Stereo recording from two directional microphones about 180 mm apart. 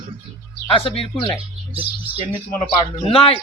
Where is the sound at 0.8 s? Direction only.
30° left (ahead or behind).